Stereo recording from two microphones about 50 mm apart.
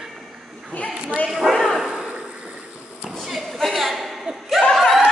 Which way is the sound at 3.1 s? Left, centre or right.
Centre.